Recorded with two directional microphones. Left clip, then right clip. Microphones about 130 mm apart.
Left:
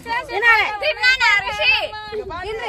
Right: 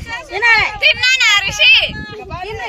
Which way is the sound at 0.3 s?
90° right.